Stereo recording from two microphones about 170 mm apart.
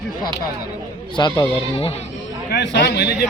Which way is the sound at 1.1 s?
25° left (ahead or behind).